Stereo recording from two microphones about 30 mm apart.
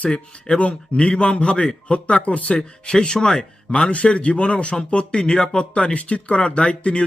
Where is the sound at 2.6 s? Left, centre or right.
Left.